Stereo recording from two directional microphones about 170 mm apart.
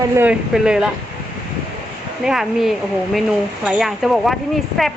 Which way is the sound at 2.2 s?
Centre (ahead or behind).